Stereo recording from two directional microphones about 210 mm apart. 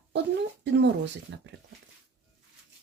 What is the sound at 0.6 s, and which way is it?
Speech, 55° right (ahead or behind).